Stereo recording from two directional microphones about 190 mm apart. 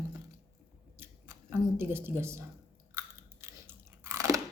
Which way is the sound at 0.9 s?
10° right (ahead or behind).